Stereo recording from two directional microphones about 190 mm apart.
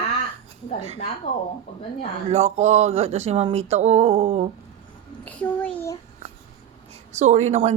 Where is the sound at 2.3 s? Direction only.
35° right (ahead or behind).